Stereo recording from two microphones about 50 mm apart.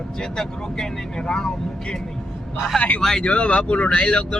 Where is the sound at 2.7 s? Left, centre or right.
Left.